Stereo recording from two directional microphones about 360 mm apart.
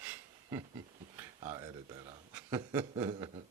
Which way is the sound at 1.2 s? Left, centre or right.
Centre.